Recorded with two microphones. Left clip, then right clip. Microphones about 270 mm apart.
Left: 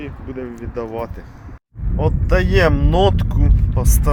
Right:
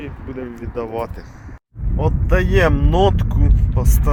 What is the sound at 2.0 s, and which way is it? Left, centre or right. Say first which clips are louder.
Speech: left 1 dB; centre.